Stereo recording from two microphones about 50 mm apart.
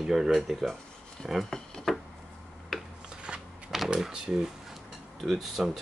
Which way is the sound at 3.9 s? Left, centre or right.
Centre.